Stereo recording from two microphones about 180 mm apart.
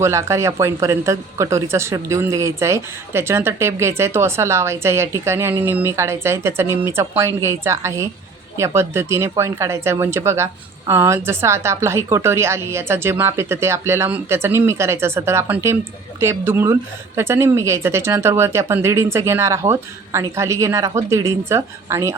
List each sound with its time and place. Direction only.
0.0 s speech: 15° right (ahead or behind)